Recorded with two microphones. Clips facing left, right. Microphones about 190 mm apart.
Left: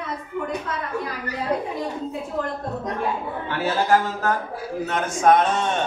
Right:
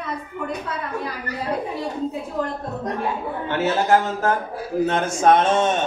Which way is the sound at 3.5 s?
25° right (ahead or behind).